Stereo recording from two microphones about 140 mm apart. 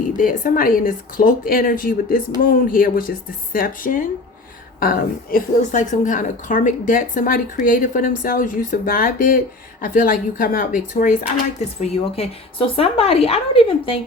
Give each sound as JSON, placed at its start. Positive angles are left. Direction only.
{"t": 0.2, "sound": "a woman's voice", "side_deg": 80}
{"t": 11.8, "sound": "a woman's voice", "side_deg": 45}